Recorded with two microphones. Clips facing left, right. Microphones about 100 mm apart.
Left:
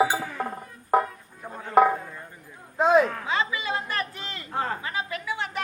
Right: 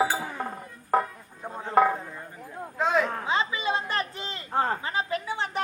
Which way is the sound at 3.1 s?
25° right (ahead or behind).